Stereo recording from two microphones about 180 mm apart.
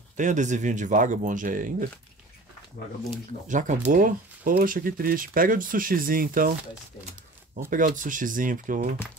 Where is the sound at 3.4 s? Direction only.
45° right (ahead or behind).